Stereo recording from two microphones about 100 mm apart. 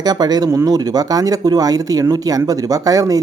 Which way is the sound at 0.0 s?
45° right (ahead or behind).